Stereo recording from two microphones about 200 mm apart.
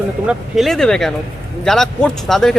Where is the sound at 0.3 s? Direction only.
Centre (ahead or behind).